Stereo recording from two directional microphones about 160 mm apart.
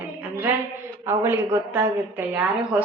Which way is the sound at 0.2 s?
10° right (ahead or behind).